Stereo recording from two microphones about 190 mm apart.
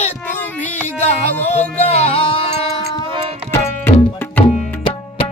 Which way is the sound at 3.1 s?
30° right (ahead or behind).